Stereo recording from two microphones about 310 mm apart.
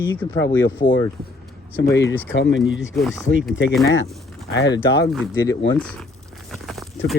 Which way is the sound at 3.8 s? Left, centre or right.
Left.